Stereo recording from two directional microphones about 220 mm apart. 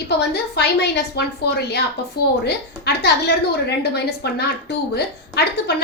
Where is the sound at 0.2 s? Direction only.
50° left (ahead or behind).